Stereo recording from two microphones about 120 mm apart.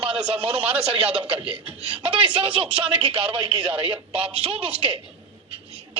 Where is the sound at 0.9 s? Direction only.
50° right (ahead or behind).